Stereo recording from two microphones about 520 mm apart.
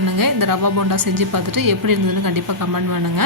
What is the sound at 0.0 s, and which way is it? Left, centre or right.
Speech, right.